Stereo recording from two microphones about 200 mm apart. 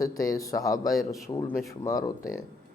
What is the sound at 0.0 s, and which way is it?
Speech, 15° left (ahead or behind).